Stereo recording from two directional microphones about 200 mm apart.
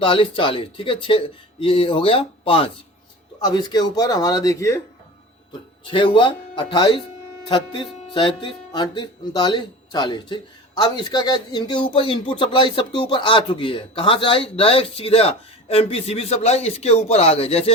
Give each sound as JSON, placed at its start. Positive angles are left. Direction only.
{"t": 0.0, "sound": "speech", "side_deg": 25}
{"t": 5.8, "sound": "speech", "side_deg": 25}